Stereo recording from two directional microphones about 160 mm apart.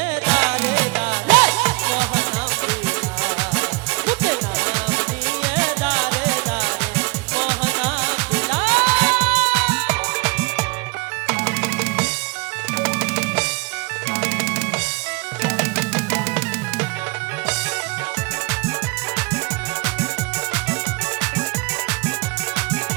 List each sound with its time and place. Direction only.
0.3 s music: 5° right (ahead or behind)